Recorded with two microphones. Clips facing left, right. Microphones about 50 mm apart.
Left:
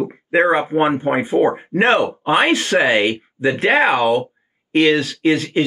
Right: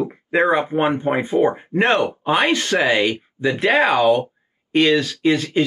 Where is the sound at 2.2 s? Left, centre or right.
Left.